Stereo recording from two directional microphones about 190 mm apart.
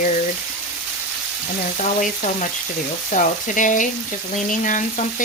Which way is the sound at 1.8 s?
40° left (ahead or behind).